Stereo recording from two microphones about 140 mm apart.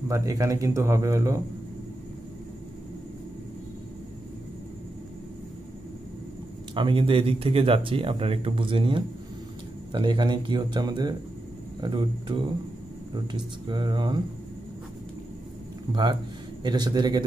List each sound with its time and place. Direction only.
0.1 s speech: 20° right (ahead or behind)
6.7 s speech: 35° right (ahead or behind)
15.9 s speech: 30° right (ahead or behind)